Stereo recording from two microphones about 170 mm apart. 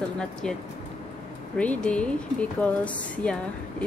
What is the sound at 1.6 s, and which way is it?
A woman's voice, 5° left (ahead or behind).